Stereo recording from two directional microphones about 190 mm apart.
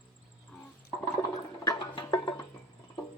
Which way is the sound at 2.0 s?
20° left (ahead or behind).